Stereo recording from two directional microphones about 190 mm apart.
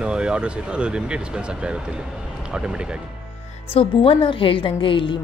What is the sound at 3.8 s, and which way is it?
A woman's voice, 25° left (ahead or behind).